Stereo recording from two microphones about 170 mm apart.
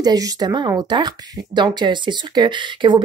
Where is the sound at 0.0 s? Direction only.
20° right (ahead or behind).